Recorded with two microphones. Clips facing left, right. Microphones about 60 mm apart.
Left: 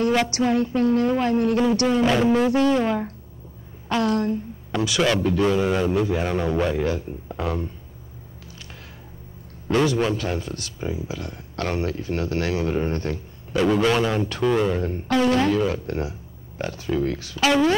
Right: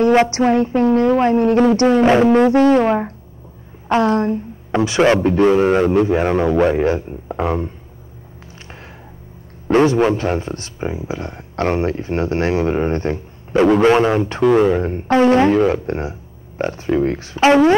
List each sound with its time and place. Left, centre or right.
0.0 s speech: right
9.7 s speech: right